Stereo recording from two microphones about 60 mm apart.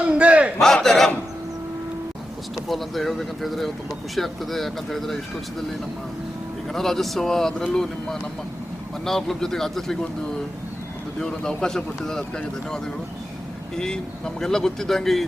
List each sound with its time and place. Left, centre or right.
0.0 s battle cry: right
0.6 s battle cry: centre
2.6 s speech: centre
6.7 s speech: centre
11.2 s speech: centre
13.7 s speech: centre